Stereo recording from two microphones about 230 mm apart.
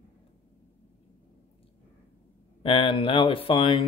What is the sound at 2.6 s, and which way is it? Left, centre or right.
Speech, left.